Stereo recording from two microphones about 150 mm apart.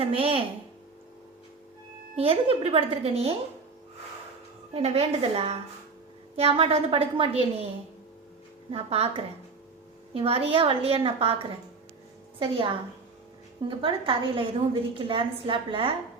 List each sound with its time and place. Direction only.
0.0 s a woman's voice: 35° right (ahead or behind)
2.1 s a woman's voice: 40° right (ahead or behind)
4.7 s a woman's voice: 40° right (ahead or behind)
8.7 s a woman's voice: 40° right (ahead or behind)